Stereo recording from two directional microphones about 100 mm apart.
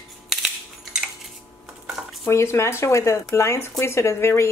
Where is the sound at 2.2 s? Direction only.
30° left (ahead or behind).